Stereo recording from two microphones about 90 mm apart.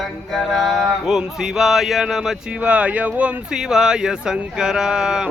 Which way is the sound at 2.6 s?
15° right (ahead or behind).